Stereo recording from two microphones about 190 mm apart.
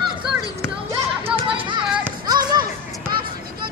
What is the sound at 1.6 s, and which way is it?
Music, 25° right (ahead or behind).